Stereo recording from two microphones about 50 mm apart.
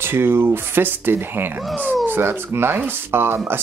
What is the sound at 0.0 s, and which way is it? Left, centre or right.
Speech, right.